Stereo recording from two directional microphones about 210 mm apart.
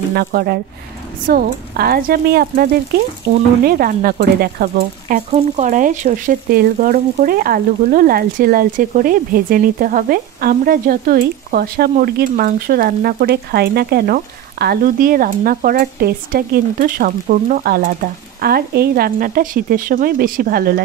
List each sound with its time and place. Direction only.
0.1 s speech: 45° right (ahead or behind)